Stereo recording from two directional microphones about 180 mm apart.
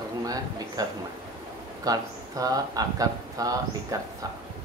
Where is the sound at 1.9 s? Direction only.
20° right (ahead or behind).